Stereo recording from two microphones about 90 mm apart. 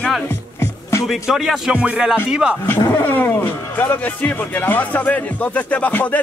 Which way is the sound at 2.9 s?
25° left (ahead or behind).